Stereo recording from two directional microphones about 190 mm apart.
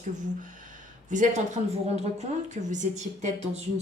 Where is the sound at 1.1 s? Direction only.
40° right (ahead or behind).